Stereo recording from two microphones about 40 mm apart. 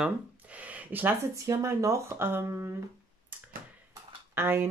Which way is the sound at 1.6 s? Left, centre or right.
Right.